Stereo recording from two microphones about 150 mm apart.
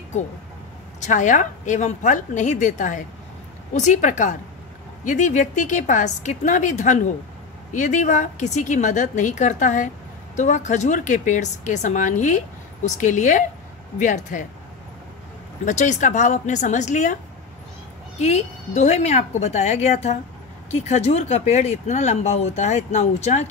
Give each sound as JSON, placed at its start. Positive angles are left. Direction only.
{"t": 1.0, "sound": "a woman's voice", "side_deg": 55}
{"t": 15.6, "sound": "speech", "side_deg": 55}
{"t": 18.2, "sound": "speech", "side_deg": 50}